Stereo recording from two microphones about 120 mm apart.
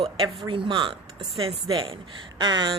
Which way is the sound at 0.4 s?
45° right (ahead or behind).